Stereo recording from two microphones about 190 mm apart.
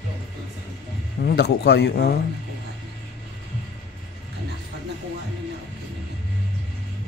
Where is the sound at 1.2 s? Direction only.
60° left (ahead or behind).